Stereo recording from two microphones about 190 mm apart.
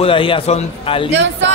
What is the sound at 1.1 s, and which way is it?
Speech, 70° right (ahead or behind).